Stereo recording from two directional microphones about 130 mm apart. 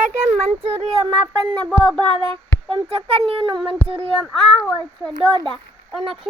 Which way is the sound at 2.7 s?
50° right (ahead or behind).